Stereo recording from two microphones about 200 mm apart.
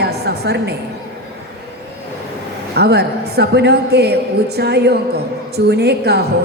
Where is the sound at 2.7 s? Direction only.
55° right (ahead or behind).